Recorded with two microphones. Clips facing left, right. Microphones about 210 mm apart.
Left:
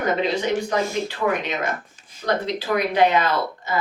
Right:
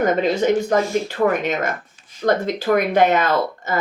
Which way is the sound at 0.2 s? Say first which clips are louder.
Right 5 dB; 50° right (ahead or behind).